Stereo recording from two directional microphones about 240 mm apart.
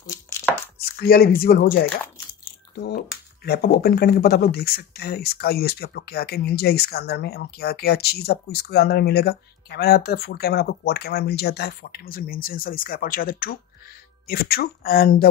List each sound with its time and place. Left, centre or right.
0.1 s chopping: centre
0.9 s speech: left